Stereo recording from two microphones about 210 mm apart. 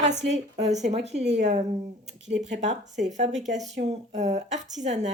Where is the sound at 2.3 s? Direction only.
40° right (ahead or behind).